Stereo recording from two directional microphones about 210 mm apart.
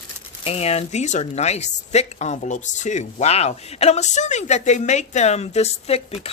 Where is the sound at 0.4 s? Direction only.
30° left (ahead or behind).